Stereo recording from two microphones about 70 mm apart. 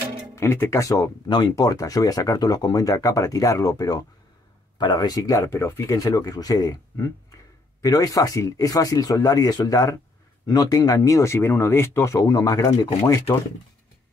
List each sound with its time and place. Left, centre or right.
0.4 s speech: left
4.7 s speech: left
10.4 s speech: left
11.4 s speech: left